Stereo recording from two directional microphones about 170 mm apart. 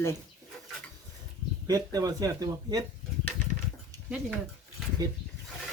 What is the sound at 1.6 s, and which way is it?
Speech, 20° right (ahead or behind).